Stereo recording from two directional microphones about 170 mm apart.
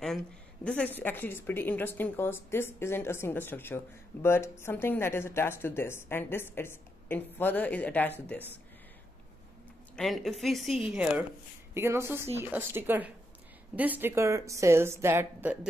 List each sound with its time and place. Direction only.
0.7 s a woman's voice: 10° left (ahead or behind)
9.9 s a woman's voice: centre (ahead or behind)
11.7 s a woman's voice: 15° right (ahead or behind)